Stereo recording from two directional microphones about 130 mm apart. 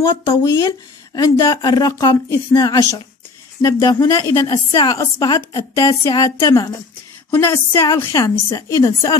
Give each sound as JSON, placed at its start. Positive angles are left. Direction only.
{"t": 0.0, "sound": "speech", "side_deg": 30}